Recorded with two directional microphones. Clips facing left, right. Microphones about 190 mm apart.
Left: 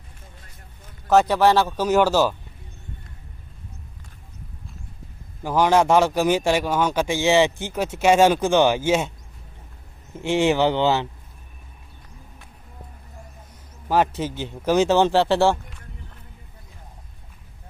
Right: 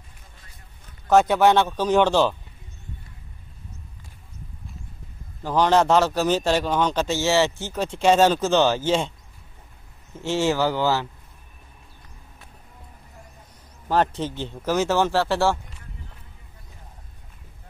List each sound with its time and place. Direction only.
1.0 s speech: centre (ahead or behind)
5.4 s a man's voice: 10° left (ahead or behind)
10.1 s speech: 15° left (ahead or behind)
13.8 s a man's voice: 5° left (ahead or behind)